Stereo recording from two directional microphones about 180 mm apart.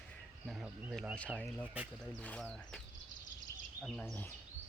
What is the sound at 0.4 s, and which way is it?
Speech, 5° right (ahead or behind).